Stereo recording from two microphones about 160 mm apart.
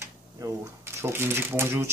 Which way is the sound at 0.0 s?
15° right (ahead or behind).